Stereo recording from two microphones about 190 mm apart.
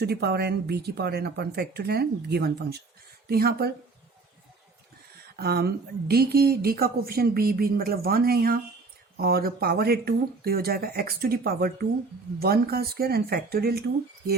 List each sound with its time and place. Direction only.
0.0 s speech: 60° right (ahead or behind)
5.4 s a woman's voice: 55° right (ahead or behind)